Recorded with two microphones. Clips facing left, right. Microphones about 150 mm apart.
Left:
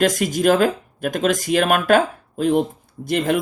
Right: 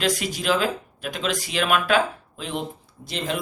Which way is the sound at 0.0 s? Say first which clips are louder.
Left 8 dB; 45° left (ahead or behind).